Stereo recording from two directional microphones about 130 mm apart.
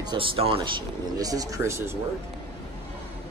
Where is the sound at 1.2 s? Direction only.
30° right (ahead or behind).